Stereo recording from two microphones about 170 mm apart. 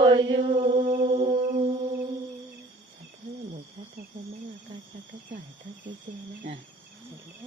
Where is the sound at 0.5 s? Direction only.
45° right (ahead or behind).